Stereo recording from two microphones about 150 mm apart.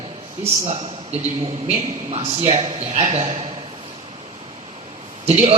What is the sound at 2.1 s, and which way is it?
A man's voice, 45° right (ahead or behind).